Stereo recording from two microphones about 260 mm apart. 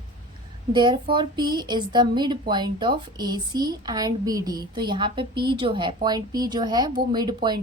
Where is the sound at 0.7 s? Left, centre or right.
Centre.